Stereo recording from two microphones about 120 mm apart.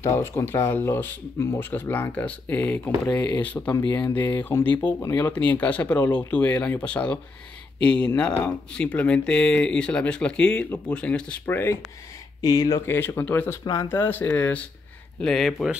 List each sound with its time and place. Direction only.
0.0 s speech: 20° left (ahead or behind)
15.2 s speech: centre (ahead or behind)